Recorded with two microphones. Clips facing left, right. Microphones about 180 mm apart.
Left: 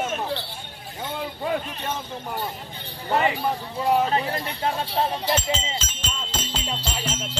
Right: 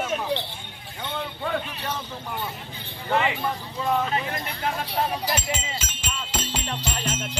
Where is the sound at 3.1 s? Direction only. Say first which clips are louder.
Left 2 dB; 35° left (ahead or behind).